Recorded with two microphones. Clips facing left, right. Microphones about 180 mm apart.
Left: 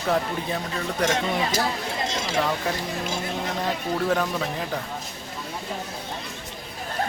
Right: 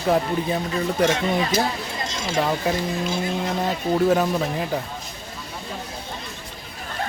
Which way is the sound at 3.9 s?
25° right (ahead or behind).